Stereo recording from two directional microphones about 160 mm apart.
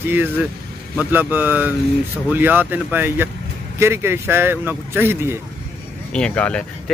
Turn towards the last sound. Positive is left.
turn(degrees=5)  # may be behind; listen again after turning